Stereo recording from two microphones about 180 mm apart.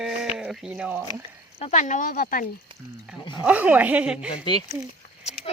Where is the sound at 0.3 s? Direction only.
5° right (ahead or behind).